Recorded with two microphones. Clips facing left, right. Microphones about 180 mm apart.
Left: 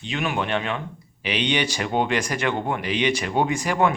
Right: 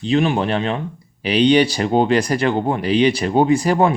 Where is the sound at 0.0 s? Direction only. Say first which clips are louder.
Right 9 dB; 35° right (ahead or behind).